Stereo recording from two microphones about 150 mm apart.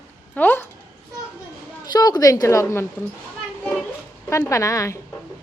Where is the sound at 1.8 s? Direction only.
25° left (ahead or behind).